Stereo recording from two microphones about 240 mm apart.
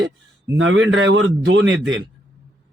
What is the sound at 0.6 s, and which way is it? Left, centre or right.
Speech, right.